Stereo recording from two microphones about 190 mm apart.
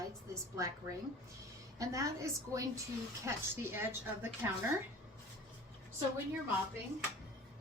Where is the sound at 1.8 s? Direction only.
15° right (ahead or behind).